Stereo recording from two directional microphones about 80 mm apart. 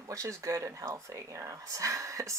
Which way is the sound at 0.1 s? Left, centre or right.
Right.